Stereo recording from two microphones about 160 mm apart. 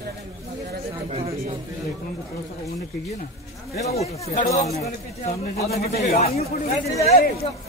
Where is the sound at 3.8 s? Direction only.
40° left (ahead or behind).